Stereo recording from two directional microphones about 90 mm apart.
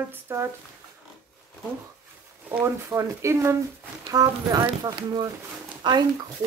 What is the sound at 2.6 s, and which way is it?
A woman's voice, 35° right (ahead or behind).